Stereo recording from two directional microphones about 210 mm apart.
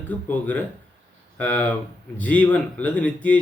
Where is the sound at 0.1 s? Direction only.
5° left (ahead or behind).